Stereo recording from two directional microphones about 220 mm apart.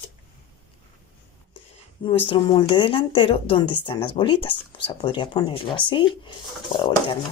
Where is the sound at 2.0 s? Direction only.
20° left (ahead or behind).